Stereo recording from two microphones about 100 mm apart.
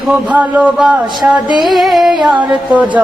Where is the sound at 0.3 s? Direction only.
15° right (ahead or behind).